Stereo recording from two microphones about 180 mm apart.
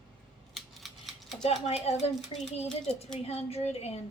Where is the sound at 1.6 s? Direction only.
35° left (ahead or behind).